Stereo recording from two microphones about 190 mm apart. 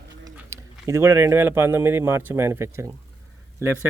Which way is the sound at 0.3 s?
15° right (ahead or behind).